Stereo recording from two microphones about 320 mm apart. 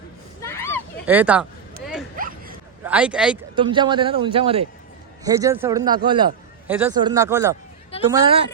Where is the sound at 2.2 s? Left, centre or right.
Right.